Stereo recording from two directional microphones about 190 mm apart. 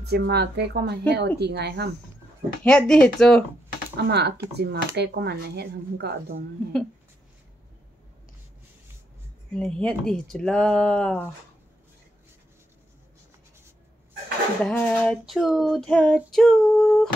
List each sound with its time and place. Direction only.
0.0 s speech: 60° right (ahead or behind)
2.6 s child singing: 5° left (ahead or behind)
3.9 s speech: 60° right (ahead or behind)
9.5 s child singing: 5° left (ahead or behind)
14.6 s child singing: 5° left (ahead or behind)